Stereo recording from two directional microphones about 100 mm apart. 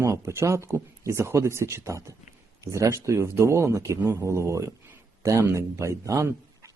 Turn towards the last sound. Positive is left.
turn(degrees=-30)  # may be behind; listen again after turning